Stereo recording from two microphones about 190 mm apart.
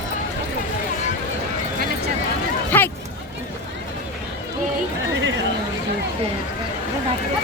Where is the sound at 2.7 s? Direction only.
10° left (ahead or behind).